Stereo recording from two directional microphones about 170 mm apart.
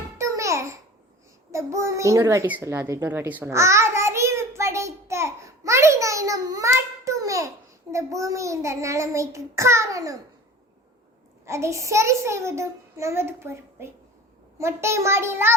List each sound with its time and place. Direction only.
0.2 s babbling: 20° right (ahead or behind)
1.5 s a child's voice: 15° right (ahead or behind)
11.4 s a child's voice: 15° right (ahead or behind)